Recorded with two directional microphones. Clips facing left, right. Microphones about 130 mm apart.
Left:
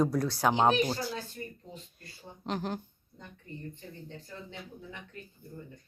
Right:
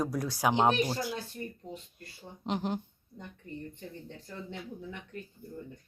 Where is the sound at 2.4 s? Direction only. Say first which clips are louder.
Right 2 dB; 20° right (ahead or behind).